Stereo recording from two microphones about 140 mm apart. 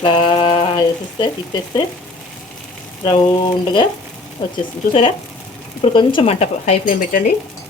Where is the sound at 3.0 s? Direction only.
35° left (ahead or behind); by 6.9 s 50° left (ahead or behind).